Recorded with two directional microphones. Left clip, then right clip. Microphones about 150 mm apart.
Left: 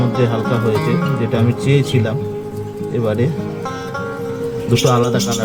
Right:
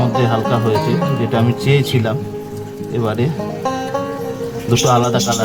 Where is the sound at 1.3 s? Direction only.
40° right (ahead or behind).